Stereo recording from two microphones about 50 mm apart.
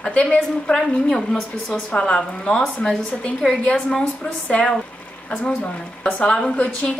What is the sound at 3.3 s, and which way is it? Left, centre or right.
Speech, centre.